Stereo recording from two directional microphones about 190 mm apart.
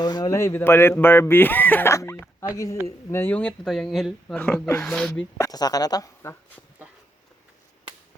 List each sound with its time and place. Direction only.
0.0 s speech: 20° left (ahead or behind); by 5.2 s 5° left (ahead or behind)
5.4 s speech: 20° left (ahead or behind)